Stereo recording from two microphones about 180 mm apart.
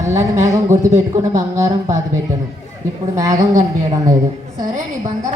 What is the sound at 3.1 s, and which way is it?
Speech, 20° right (ahead or behind).